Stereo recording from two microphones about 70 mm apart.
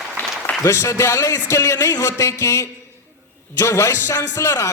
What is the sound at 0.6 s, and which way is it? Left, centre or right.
A man's voice, left.